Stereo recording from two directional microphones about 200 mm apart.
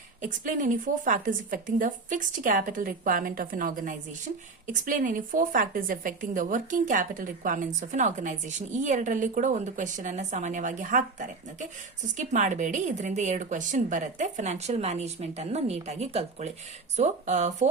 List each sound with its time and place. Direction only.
0.2 s a woman's voice: 40° right (ahead or behind)